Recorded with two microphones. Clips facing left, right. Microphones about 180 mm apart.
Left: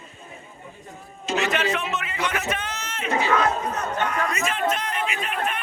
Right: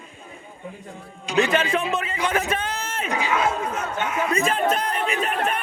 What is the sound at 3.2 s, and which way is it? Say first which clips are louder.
A man's voice: left 1 dB; 10° right (ahead or behind).